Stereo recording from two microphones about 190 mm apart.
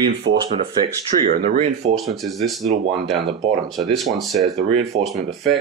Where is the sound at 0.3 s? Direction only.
90° right.